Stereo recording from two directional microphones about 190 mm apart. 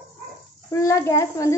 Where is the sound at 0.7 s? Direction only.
15° left (ahead or behind).